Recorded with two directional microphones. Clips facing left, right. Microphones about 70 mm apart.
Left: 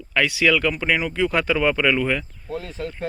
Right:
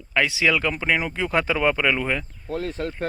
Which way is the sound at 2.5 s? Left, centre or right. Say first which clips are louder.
Right 2 dB; right.